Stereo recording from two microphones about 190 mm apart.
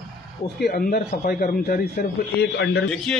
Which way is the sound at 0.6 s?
50° left (ahead or behind).